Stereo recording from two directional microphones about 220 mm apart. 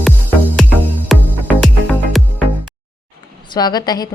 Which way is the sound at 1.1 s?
Centre (ahead or behind).